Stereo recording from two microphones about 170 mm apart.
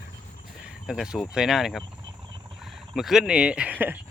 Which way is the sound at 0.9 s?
Centre (ahead or behind).